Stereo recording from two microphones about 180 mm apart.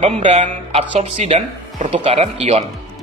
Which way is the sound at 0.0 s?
40° right (ahead or behind).